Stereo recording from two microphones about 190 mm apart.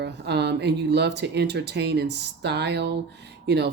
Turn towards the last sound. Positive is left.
turn(degrees=-60)  # may be behind; listen again after turning